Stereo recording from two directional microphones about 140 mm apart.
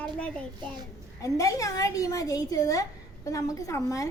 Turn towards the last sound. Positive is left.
turn(degrees=25)  # may be behind; listen again after turning